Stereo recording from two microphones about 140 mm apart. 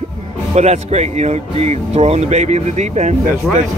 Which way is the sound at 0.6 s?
50° right (ahead or behind).